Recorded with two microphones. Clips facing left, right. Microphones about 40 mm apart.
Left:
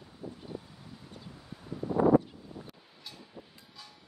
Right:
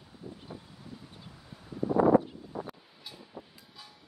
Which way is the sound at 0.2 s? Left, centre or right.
Centre.